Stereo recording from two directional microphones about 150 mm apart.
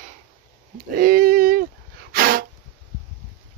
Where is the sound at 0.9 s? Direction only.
70° right (ahead or behind).